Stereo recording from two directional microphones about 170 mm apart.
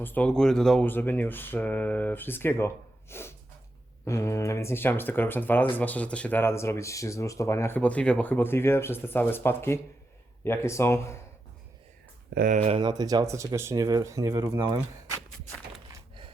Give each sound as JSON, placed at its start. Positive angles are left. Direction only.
{"t": 0.0, "sound": "speech", "side_deg": 10}
{"t": 12.3, "sound": "speech", "side_deg": -60}
{"t": 12.6, "sound": "speech", "side_deg": -35}
{"t": 12.9, "sound": "speech", "side_deg": -25}